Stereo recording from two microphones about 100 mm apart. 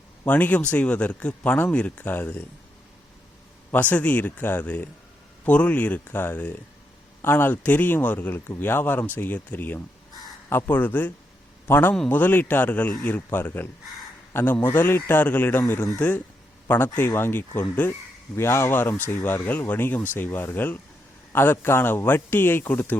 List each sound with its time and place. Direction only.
0.3 s speech: 15° left (ahead or behind)
3.7 s speech: 15° left (ahead or behind)